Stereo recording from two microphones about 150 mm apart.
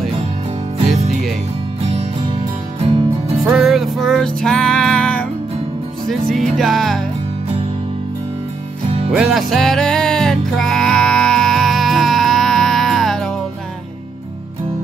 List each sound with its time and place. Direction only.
0.7 s music: 45° right (ahead or behind)
2.8 s music: 40° right (ahead or behind)
3.4 s music: 5° right (ahead or behind)
9.1 s music: centre (ahead or behind)